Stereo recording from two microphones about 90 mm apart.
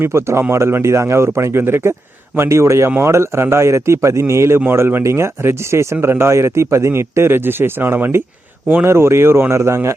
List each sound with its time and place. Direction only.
0.0 s a man's voice: 30° right (ahead or behind)